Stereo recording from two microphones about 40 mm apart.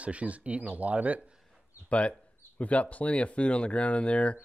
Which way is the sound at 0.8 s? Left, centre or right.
Right.